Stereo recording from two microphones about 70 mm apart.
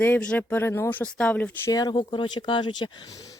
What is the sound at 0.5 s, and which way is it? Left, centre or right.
Speech, left.